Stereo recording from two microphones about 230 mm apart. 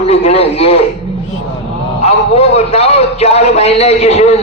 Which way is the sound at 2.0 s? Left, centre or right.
Left.